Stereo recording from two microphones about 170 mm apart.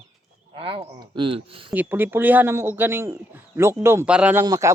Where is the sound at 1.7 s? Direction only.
10° right (ahead or behind).